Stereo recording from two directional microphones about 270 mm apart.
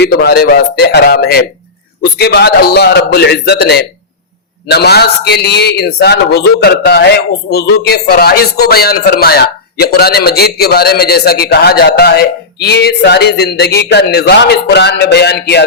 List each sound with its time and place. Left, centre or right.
0.0 s a man's voice: left